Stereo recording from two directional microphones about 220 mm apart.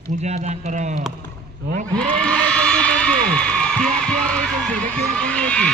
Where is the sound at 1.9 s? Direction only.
5° left (ahead or behind).